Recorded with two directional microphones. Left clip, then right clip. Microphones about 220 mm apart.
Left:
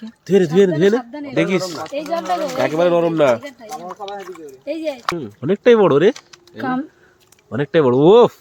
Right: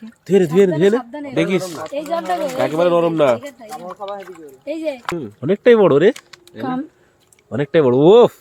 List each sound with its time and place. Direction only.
0.0 s speech: centre (ahead or behind)
0.9 s speech: 20° right (ahead or behind)
1.3 s speech: 5° right (ahead or behind)
1.9 s speech: 20° right (ahead or behind)
2.5 s speech: centre (ahead or behind)
3.8 s speech: 15° left (ahead or behind)
4.6 s speech: 15° right (ahead or behind)
5.1 s speech: 5° right (ahead or behind)
6.6 s speech: 20° left (ahead or behind)
7.5 s speech: centre (ahead or behind)